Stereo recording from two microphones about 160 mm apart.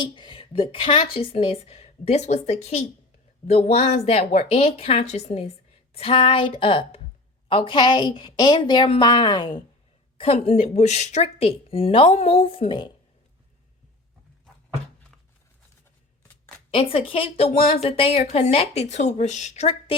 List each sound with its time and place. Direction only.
0.0 s a woman's voice: 30° left (ahead or behind)
16.7 s a woman's voice: 35° left (ahead or behind)